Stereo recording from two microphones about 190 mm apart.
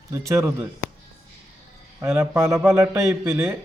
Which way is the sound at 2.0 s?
15° right (ahead or behind).